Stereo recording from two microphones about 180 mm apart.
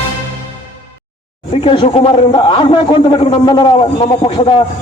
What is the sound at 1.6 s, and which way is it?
A man's voice, 25° left (ahead or behind).